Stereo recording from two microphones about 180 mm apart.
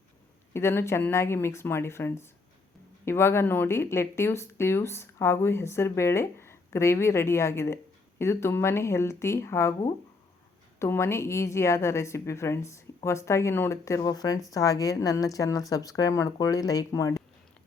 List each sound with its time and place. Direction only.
0.5 s speech: 15° left (ahead or behind)